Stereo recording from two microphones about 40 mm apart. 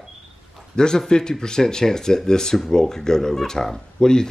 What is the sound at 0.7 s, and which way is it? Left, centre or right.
A man's voice, centre.